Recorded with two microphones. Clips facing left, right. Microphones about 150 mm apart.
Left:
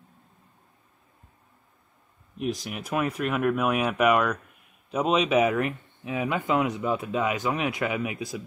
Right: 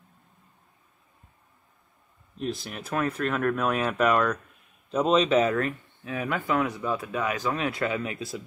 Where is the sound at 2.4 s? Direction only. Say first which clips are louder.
Left 2 dB; 10° left (ahead or behind).